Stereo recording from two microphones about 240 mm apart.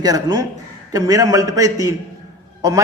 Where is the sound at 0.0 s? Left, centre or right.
Centre.